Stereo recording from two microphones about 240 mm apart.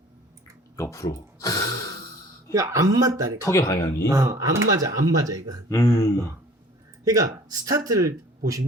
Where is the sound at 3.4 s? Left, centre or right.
Centre.